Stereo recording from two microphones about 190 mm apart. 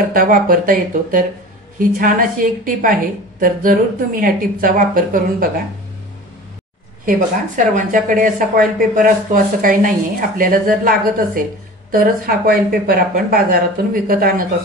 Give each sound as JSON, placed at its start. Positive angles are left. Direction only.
{"t": 0.1, "sound": "speech", "side_deg": -50}
{"t": 7.1, "sound": "speech", "side_deg": -45}